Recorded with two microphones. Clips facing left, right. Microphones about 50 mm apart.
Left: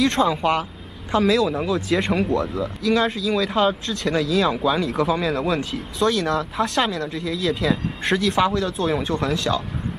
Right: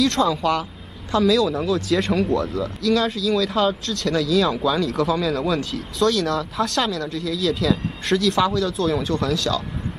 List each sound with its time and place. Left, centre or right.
0.0 s speech: centre